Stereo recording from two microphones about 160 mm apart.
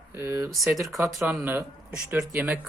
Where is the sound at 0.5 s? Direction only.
Centre (ahead or behind).